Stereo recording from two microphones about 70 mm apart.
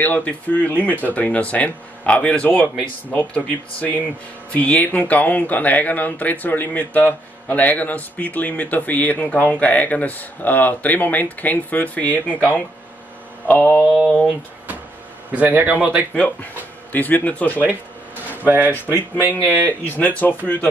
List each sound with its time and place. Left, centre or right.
0.0 s speech: left
13.5 s speech: left
15.3 s a man's voice: right
16.2 s speech: left
17.6 s a sound: right
18.9 s speech: right
20.0 s speech: left